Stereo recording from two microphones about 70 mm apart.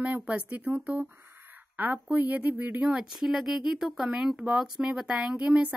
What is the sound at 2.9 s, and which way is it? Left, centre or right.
Speech, centre.